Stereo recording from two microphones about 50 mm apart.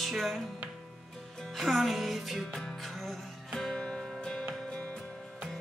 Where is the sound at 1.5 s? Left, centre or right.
Centre.